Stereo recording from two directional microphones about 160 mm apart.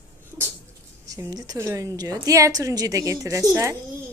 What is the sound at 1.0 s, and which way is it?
A woman's voice, 20° right (ahead or behind).